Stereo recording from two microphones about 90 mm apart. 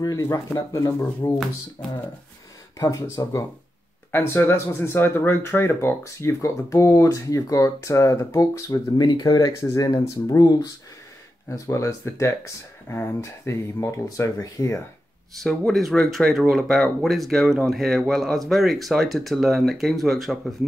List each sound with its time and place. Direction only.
0.0 s speech: 35° left (ahead or behind)
2.8 s speech: 35° left (ahead or behind)
4.1 s speech: 25° left (ahead or behind)
15.3 s speech: 5° left (ahead or behind)